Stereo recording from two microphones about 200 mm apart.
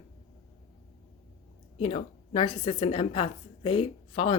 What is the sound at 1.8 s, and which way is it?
A woman's voice, 25° left (ahead or behind).